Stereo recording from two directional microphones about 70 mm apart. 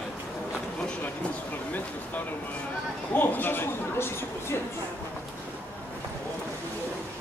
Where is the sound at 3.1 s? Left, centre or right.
Left.